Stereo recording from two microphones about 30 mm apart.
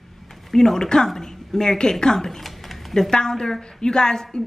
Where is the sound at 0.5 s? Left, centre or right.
Centre.